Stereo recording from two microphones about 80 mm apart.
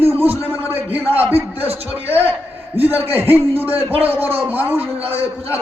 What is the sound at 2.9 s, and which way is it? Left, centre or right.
A man's voice, right.